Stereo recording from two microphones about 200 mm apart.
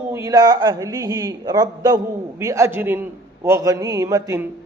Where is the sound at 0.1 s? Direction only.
15° right (ahead or behind).